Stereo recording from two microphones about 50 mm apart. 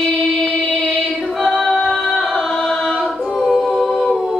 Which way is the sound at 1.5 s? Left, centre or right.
Centre.